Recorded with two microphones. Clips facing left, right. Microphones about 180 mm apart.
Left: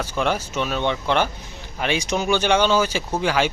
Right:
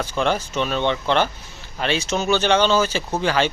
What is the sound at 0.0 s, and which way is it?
Speech, 10° left (ahead or behind).